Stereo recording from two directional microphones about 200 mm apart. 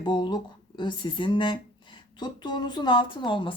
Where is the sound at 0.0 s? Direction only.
20° left (ahead or behind).